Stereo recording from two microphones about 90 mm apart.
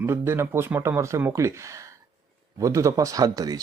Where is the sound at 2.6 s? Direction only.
35° right (ahead or behind).